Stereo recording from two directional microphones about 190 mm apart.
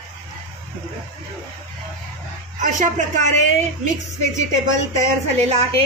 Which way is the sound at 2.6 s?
40° right (ahead or behind).